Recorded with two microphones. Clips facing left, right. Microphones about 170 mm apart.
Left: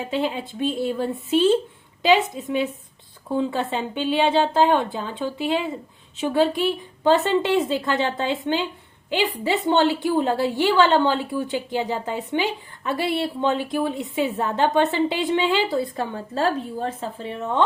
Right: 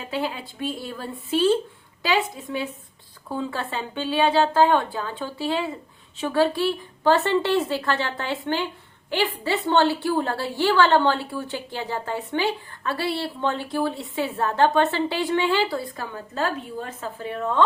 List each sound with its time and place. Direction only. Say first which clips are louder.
0.0 s a woman's voice: left 4 dB; 25° left (ahead or behind)